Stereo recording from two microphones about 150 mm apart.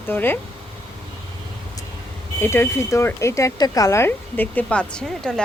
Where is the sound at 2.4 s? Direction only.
15° left (ahead or behind).